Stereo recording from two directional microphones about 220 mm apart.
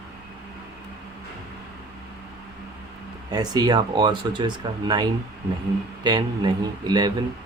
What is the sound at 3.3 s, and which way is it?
Speech, 20° right (ahead or behind).